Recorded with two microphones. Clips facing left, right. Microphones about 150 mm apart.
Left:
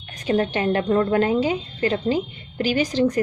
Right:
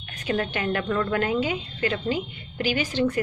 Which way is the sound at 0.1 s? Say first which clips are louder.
Left 5 dB; 35° left (ahead or behind).